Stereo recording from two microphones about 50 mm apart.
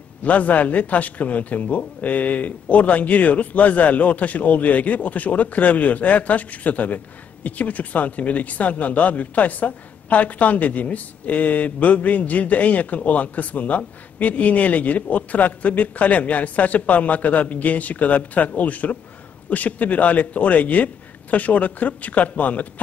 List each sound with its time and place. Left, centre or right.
0.2 s speech: left